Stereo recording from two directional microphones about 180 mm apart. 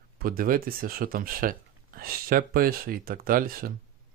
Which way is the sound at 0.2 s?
55° right (ahead or behind).